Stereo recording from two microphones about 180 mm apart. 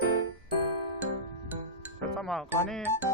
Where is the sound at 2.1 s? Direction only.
Centre (ahead or behind).